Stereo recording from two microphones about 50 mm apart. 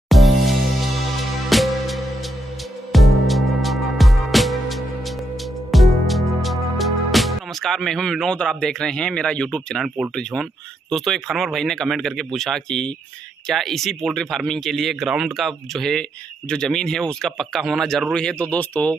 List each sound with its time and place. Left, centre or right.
0.1 s music: centre
8.4 s speech: centre
9.8 s speech: centre
18.1 s speech: centre
18.5 s speech: left